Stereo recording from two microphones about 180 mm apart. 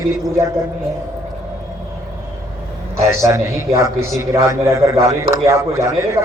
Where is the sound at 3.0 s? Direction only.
15° right (ahead or behind).